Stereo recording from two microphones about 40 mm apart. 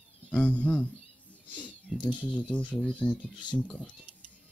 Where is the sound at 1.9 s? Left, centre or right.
Centre.